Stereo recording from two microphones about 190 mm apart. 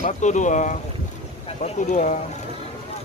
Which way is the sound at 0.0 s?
40° left (ahead or behind).